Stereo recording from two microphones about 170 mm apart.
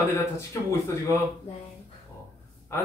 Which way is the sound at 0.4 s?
15° left (ahead or behind).